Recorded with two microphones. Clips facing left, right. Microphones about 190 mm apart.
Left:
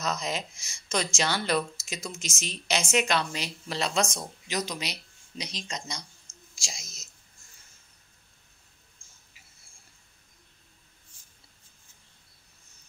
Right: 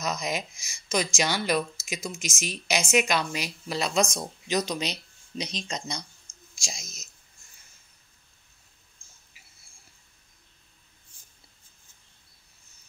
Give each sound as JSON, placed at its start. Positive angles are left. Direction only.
{"t": 0.0, "sound": "speech", "side_deg": -10}